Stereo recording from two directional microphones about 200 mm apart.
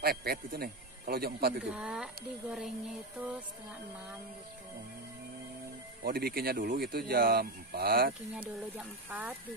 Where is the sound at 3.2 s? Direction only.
5° right (ahead or behind).